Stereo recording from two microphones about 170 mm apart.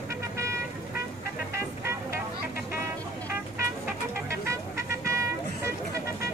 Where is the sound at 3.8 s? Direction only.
15° right (ahead or behind).